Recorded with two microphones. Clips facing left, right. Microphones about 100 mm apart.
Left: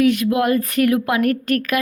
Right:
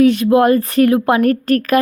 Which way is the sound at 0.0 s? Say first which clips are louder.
Right 6 dB; 30° right (ahead or behind).